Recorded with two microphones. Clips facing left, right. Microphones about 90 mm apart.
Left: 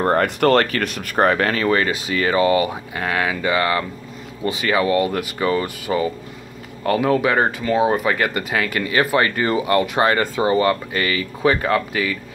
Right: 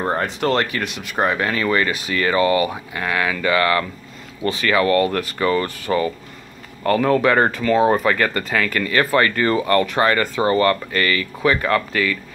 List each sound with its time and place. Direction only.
0.0 s speech: 60° left (ahead or behind)
0.6 s speech: 45° left (ahead or behind)
1.5 s speech: 30° left (ahead or behind)